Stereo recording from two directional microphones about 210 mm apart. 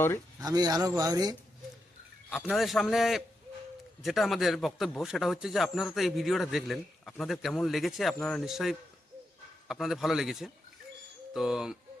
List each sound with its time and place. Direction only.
0.3 s a man's voice: 20° right (ahead or behind)
2.3 s speech: centre (ahead or behind)